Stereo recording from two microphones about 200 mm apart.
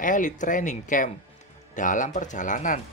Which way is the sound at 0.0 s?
40° left (ahead or behind).